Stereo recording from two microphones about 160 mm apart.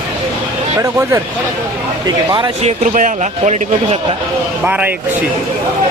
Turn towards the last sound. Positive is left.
turn(degrees=-10)  # may be behind; listen again after turning